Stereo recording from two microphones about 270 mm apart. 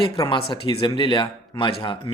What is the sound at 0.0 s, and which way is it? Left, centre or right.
Speech, centre.